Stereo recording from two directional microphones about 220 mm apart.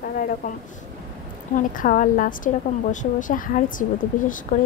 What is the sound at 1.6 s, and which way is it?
A woman's voice, 35° left (ahead or behind).